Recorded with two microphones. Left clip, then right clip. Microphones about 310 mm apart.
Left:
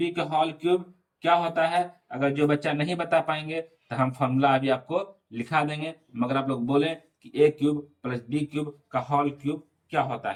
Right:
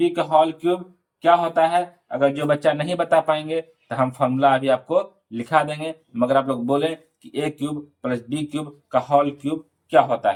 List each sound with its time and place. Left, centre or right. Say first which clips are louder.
0.0 s speech: right 8 dB; centre